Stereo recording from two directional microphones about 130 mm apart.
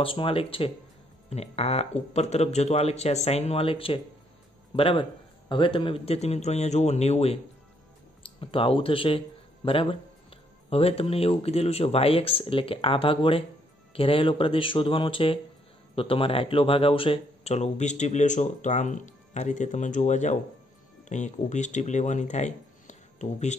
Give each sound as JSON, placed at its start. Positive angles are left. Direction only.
{"t": 0.0, "sound": "speech", "side_deg": 45}
{"t": 1.3, "sound": "speech", "side_deg": 55}
{"t": 8.2, "sound": "speech", "side_deg": 45}